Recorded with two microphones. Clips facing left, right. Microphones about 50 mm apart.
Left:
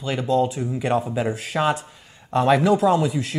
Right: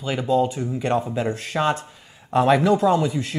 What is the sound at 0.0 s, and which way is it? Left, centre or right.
Speech, centre.